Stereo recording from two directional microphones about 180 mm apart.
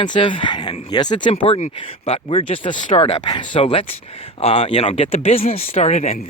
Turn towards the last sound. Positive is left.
turn(degrees=40)  # may be behind; listen again after turning